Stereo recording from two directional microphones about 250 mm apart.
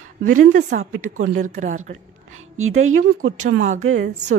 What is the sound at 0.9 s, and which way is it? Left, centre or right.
Speech, right.